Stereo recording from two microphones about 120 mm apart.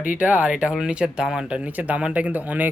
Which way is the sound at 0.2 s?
10° right (ahead or behind).